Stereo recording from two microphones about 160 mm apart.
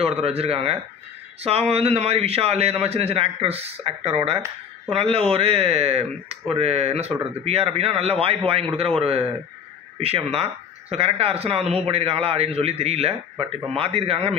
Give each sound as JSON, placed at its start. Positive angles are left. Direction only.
{"t": 0.0, "sound": "speech", "side_deg": -40}